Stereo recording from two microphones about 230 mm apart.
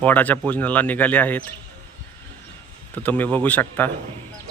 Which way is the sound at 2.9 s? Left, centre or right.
Centre.